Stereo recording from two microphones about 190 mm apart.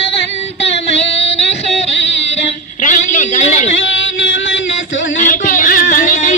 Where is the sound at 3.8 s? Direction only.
80° left.